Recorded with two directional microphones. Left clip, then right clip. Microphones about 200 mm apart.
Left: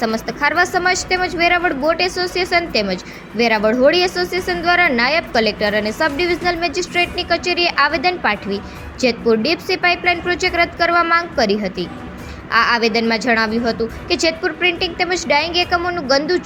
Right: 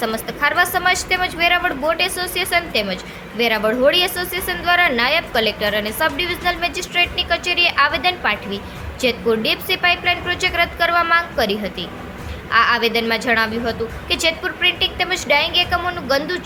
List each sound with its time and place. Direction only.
0.0 s a woman's voice: 10° left (ahead or behind)